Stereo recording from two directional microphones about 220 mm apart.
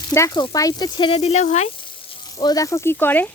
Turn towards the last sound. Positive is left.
turn(degrees=10)  # may be behind; listen again after turning